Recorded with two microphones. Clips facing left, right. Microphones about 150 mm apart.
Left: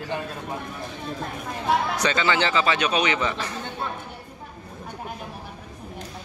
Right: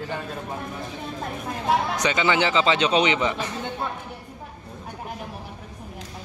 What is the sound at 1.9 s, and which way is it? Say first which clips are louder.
Speech: right 1 dB; 15° right (ahead or behind).